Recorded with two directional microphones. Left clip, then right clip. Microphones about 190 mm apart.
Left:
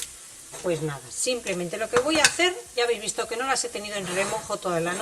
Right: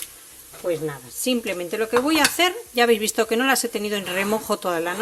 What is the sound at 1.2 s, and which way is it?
Speech, 55° right (ahead or behind).